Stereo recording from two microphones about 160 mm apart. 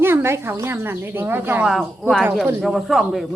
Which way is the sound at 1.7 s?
Centre (ahead or behind).